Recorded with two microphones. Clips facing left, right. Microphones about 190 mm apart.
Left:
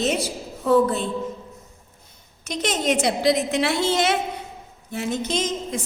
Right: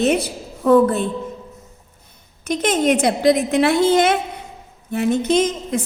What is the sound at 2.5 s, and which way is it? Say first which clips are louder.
A woman's voice: right 6 dB; 55° right (ahead or behind).